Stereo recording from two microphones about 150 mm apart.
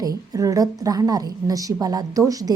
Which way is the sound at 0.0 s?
25° right (ahead or behind).